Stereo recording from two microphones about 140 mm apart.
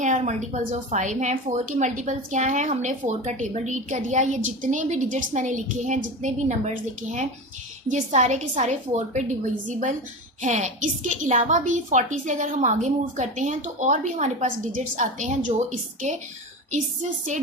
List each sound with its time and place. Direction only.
0.0 s a woman's voice: 60° right (ahead or behind)
7.9 s a woman's voice: 60° right (ahead or behind)
10.4 s a woman's voice: 60° right (ahead or behind)